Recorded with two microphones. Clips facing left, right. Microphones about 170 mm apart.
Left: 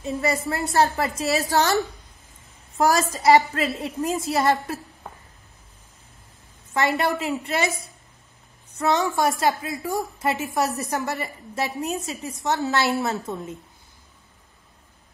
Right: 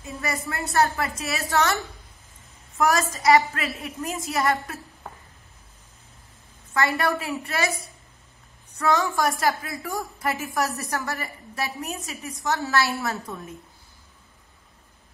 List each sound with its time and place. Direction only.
0.0 s a woman's voice: 30° left (ahead or behind)
2.8 s a woman's voice: 30° left (ahead or behind)
6.7 s a woman's voice: 20° left (ahead or behind)
8.7 s a woman's voice: 20° left (ahead or behind)